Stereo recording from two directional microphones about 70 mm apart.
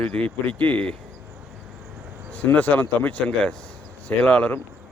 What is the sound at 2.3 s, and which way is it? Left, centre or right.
Speech, left.